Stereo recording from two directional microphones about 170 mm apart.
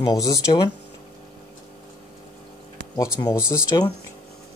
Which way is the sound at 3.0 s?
20° left (ahead or behind).